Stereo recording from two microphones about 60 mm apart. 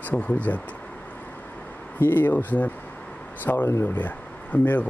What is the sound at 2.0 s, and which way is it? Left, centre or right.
Speech, left.